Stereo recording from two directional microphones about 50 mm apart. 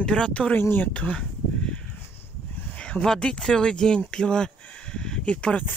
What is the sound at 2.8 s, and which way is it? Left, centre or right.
Speech, centre.